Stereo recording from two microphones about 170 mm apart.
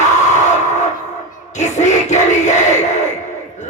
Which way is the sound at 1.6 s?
45° left (ahead or behind).